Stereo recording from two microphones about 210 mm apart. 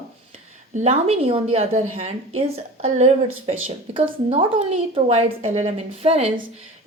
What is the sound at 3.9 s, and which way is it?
A woman's voice, 25° right (ahead or behind).